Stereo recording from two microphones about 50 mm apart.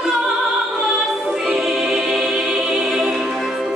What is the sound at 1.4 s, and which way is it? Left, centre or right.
Music, centre.